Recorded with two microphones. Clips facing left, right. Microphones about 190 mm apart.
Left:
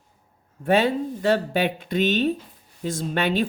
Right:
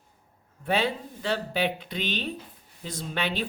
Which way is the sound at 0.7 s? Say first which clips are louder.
Left 7 dB; 50° left (ahead or behind).